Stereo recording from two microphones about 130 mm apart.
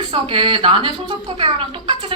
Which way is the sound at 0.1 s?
40° right (ahead or behind).